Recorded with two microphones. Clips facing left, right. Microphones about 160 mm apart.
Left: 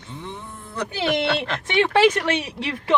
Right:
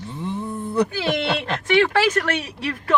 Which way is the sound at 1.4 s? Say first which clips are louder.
Right 3 dB; 20° left (ahead or behind).